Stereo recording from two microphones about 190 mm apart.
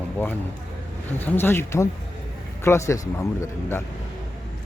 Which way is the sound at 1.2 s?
10° left (ahead or behind).